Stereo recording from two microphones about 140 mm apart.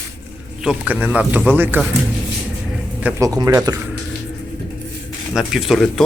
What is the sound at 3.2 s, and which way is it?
Speech, 25° right (ahead or behind).